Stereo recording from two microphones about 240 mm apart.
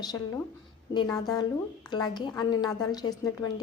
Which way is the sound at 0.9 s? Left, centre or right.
Centre.